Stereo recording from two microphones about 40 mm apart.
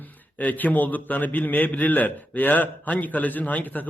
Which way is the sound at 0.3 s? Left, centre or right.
Left.